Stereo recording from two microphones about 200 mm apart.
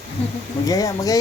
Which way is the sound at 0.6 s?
15° left (ahead or behind).